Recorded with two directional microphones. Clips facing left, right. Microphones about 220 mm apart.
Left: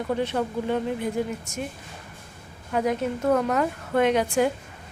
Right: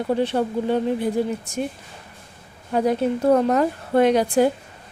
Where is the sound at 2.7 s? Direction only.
35° right (ahead or behind).